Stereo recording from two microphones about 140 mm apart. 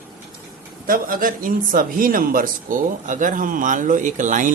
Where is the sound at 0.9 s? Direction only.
85° right.